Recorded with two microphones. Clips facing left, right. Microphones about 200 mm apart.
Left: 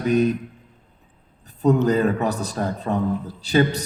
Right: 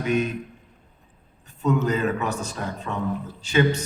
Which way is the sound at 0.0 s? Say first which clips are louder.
Left 4 dB; 35° left (ahead or behind).